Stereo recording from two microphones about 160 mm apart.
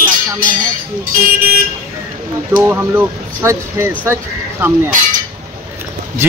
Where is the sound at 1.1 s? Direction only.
60° right (ahead or behind).